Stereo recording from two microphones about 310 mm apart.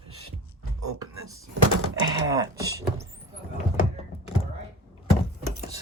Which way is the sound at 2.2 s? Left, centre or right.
Centre.